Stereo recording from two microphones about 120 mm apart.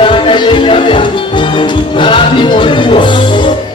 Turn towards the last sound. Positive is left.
turn(degrees=40)  # may be behind; listen again after turning